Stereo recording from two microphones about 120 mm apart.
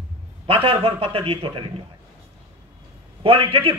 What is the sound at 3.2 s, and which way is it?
Speech, 50° right (ahead or behind).